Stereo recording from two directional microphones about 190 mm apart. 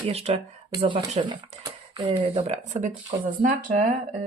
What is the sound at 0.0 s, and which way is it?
Speech, 30° right (ahead or behind).